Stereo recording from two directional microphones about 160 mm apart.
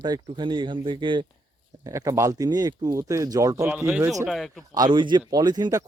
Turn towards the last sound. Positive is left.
turn(degrees=-25)  # may be behind; listen again after turning